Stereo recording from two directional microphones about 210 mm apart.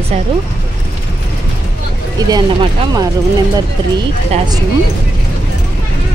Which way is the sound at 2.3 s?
20° right (ahead or behind).